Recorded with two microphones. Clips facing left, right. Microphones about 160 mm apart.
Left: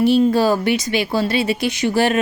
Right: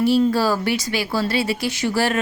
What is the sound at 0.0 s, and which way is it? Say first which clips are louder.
Speech: left 3 dB; 20° left (ahead or behind).